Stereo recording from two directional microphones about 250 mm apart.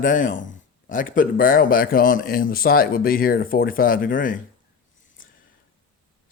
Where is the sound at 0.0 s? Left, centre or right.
Left.